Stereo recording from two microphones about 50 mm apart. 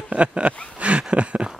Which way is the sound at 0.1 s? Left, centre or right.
Right.